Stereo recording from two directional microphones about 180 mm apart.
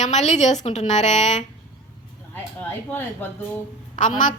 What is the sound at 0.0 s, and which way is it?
A woman's voice, 40° left (ahead or behind).